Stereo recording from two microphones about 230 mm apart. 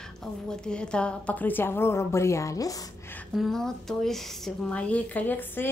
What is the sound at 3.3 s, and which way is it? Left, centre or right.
A woman's voice, centre.